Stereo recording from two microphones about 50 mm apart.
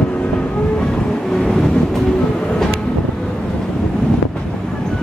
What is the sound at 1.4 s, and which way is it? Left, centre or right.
Vehicle, centre.